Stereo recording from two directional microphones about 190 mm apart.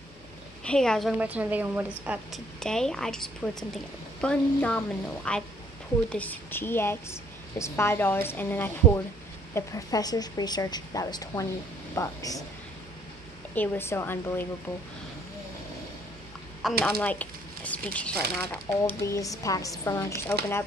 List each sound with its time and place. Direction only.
0.7 s a woman's voice: 5° left (ahead or behind)
2.6 s a woman's voice: 5° left (ahead or behind)
13.6 s a woman's voice: 10° left (ahead or behind)
16.8 s a woman's voice: 10° left (ahead or behind)